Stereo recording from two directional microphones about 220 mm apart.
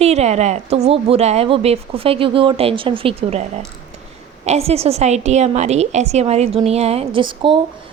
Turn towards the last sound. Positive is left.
turn(degrees=-20)  # may be behind; listen again after turning